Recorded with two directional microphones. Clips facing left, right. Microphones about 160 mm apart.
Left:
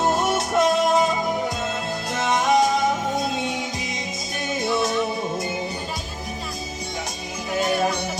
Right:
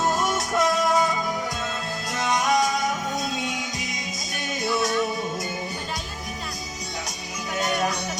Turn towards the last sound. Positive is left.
turn(degrees=30)  # may be behind; listen again after turning